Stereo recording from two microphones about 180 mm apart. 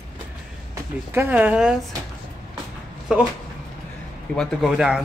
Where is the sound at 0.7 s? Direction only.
10° right (ahead or behind).